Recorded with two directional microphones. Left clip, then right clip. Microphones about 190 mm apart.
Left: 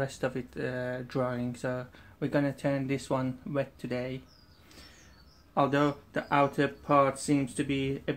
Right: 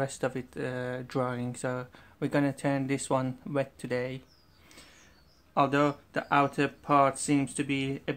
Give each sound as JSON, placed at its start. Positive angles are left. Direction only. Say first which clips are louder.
{"t": 0.0, "sound": "speech", "louder": "right 1 dB", "side_deg": -25}
{"t": 5.5, "sound": "speech", "louder": "right 1 dB", "side_deg": -25}